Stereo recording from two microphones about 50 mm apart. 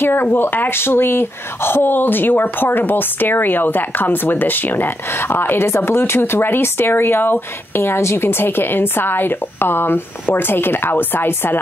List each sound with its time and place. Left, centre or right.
0.0 s speech: left
5.9 s speech: left